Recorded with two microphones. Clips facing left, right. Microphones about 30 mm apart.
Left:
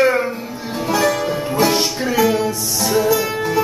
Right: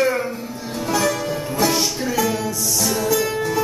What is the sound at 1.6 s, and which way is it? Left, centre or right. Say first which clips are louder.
Music: left 3 dB; centre.